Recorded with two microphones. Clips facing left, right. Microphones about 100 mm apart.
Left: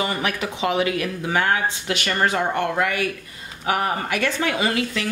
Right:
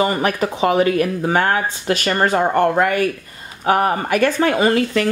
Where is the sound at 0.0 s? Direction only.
40° right (ahead or behind).